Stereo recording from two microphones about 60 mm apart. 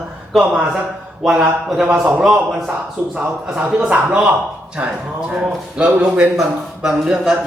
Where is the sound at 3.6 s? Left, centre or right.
Centre.